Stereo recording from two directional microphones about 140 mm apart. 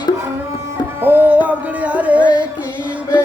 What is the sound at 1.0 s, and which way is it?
Music, 15° right (ahead or behind).